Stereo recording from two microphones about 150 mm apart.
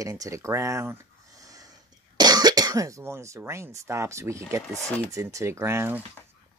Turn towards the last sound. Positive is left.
turn(degrees=-15)  # may be behind; listen again after turning